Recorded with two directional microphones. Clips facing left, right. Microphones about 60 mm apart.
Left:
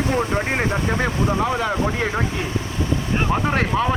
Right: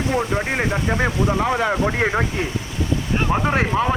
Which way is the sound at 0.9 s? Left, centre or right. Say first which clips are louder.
Right 1 dB; right.